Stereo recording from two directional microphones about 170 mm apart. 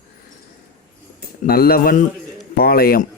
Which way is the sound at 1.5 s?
60° left (ahead or behind).